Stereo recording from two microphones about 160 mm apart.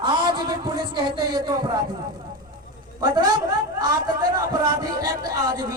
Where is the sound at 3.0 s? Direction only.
25° right (ahead or behind).